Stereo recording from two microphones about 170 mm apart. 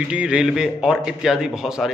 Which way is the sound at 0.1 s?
5° right (ahead or behind).